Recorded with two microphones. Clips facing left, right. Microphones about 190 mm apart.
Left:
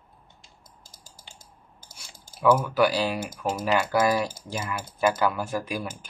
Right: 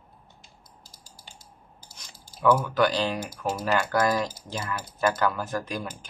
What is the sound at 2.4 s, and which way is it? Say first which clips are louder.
Speech: left 1 dB; 5° left (ahead or behind).